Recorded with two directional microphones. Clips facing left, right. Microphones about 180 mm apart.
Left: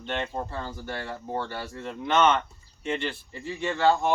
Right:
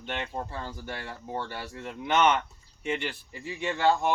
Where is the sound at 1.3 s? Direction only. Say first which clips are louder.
Left 2 dB; 10° right (ahead or behind).